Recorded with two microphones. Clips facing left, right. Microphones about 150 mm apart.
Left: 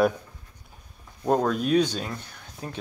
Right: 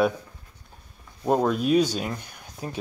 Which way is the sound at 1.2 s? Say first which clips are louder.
Right 1 dB; 5° right (ahead or behind).